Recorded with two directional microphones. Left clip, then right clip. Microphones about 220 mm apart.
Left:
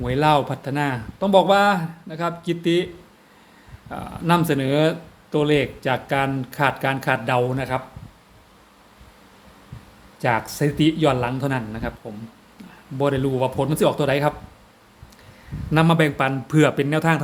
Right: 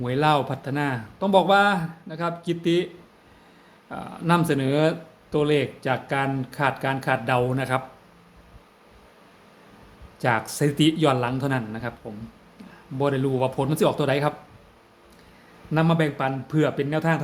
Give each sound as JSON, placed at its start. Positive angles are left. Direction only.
{"t": 0.0, "sound": "speech", "side_deg": 10}
{"t": 10.2, "sound": "a man's voice", "side_deg": 5}
{"t": 13.0, "sound": "speech", "side_deg": 5}
{"t": 15.7, "sound": "speech", "side_deg": 15}